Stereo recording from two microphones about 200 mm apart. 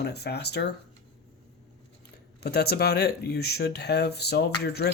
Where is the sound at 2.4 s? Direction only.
50° left (ahead or behind).